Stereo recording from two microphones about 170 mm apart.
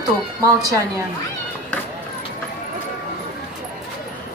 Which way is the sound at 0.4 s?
20° right (ahead or behind).